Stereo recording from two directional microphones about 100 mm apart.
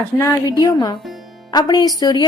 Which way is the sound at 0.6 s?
40° left (ahead or behind).